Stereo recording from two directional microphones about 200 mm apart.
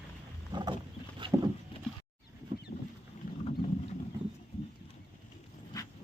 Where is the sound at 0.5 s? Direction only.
20° right (ahead or behind).